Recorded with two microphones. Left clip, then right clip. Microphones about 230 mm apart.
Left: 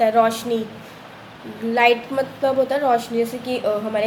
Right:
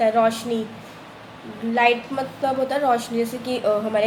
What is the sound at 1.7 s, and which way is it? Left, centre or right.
A woman's voice, centre.